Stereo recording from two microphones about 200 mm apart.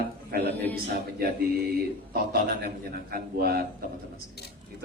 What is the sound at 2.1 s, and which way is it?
A man's voice, 50° right (ahead or behind).